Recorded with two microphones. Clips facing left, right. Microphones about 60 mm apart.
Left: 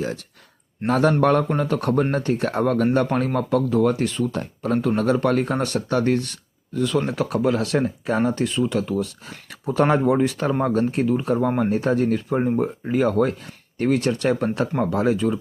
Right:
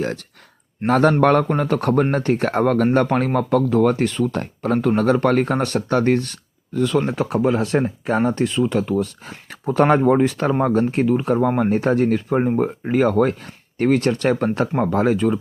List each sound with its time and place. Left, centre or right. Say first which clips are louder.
0.0 s speech: right 3 dB; right
7.3 s speech: right 2 dB; right